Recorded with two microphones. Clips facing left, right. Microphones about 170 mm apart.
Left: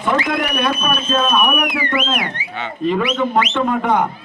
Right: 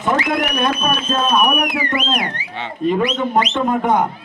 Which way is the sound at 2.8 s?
40° right (ahead or behind).